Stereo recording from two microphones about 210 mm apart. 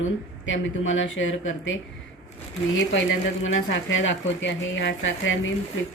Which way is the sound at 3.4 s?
65° left (ahead or behind).